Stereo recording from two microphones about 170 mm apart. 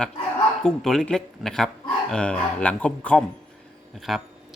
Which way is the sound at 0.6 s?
Centre (ahead or behind).